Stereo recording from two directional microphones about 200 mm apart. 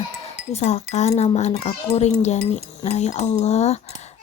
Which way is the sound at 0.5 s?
35° left (ahead or behind).